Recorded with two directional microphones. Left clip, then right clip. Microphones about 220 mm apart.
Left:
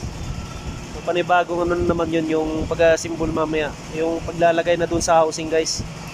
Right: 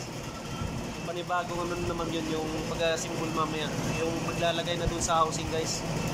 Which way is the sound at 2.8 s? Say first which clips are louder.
Left 13 dB; 35° left (ahead or behind).